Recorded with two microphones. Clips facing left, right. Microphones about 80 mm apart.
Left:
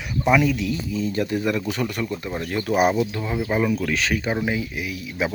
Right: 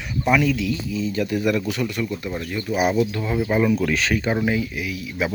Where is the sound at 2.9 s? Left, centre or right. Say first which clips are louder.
Right 2 dB; left.